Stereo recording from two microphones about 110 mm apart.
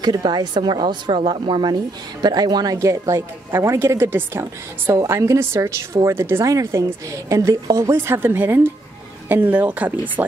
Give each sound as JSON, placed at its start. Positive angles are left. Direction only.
{"t": 0.0, "sound": "a man's voice", "side_deg": -40}